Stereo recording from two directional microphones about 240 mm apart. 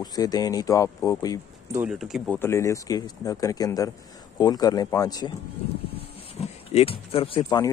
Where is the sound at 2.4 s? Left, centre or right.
Centre.